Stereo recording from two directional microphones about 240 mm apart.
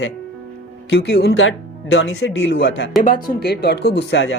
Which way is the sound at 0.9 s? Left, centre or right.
Left.